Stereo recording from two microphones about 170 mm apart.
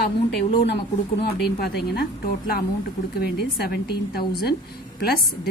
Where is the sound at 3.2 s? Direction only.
70° left (ahead or behind).